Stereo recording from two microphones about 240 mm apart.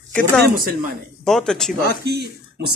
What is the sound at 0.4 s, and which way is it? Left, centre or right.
Speech, right.